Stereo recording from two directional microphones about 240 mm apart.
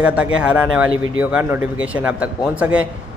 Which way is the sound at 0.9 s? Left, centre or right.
Right.